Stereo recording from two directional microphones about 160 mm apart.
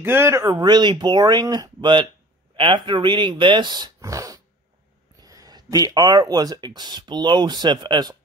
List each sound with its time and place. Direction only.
0.0 s speech: 15° right (ahead or behind)